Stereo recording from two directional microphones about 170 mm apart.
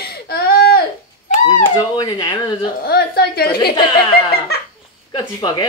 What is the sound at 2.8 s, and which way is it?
Speech, 70° left (ahead or behind).